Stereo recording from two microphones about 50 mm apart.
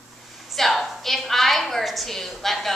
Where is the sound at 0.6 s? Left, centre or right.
Centre.